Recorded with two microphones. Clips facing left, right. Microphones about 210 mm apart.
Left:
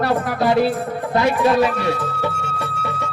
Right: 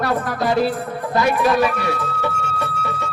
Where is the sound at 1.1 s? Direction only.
25° left (ahead or behind).